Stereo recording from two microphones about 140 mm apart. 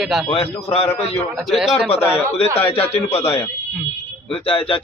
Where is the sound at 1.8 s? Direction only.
45° left (ahead or behind).